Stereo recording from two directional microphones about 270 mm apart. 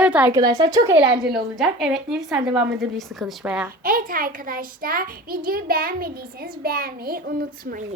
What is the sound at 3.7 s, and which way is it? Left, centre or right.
A child's voice, right.